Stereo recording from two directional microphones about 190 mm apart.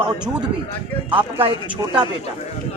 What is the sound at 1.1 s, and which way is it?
Speech, 30° right (ahead or behind).